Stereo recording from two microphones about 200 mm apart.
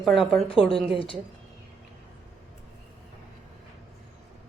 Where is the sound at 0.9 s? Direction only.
25° left (ahead or behind).